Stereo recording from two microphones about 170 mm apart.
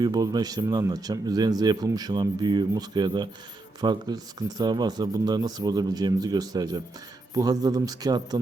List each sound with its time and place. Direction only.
0.0 s speech: 20° right (ahead or behind)